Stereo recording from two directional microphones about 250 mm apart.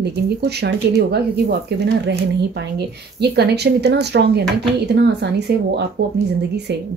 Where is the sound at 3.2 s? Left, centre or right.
Right.